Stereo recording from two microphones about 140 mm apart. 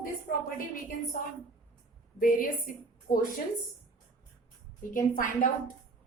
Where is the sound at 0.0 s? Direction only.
85° left.